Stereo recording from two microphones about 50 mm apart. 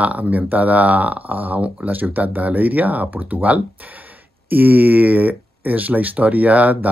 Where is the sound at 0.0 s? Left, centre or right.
Right.